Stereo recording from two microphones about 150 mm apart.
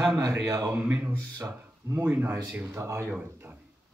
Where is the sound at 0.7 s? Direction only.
10° right (ahead or behind).